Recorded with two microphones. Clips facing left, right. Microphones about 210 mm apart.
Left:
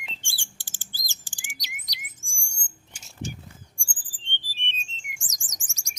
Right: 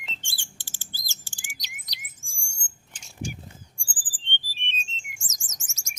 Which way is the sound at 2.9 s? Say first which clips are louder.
Right 1 dB; 10° left (ahead or behind).